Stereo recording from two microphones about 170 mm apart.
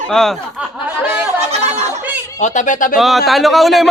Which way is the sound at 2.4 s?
45° left (ahead or behind).